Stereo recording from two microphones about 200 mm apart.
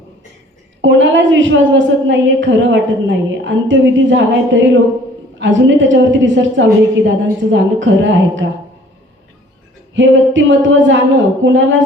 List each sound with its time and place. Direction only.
0.8 s a woman's voice: 70° right (ahead or behind)
9.9 s a woman's voice: 70° right (ahead or behind)